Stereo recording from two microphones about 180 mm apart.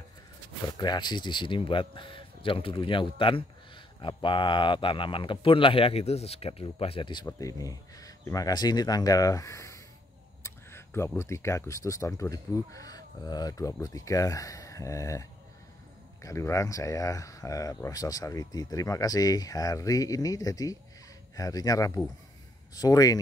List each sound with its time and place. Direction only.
0.7 s speech: 25° left (ahead or behind)